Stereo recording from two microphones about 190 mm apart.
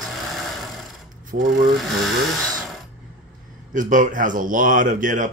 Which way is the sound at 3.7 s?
45° right (ahead or behind).